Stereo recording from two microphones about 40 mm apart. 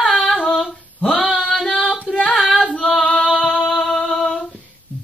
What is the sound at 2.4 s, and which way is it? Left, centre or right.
Singing, centre.